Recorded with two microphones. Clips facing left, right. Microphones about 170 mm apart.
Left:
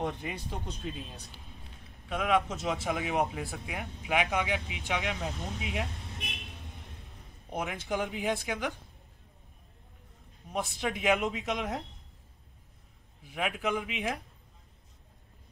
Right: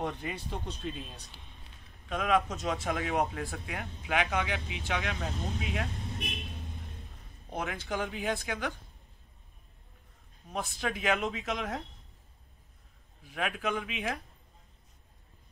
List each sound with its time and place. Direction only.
0.0 s speech: 10° left (ahead or behind)
2.0 s speech: 5° left (ahead or behind)
7.4 s speech: 15° left (ahead or behind)
10.5 s speech: 15° left (ahead or behind)
13.2 s speech: 10° left (ahead or behind)